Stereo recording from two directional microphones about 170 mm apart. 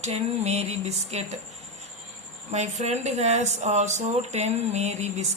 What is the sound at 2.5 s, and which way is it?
Speech, 40° right (ahead or behind).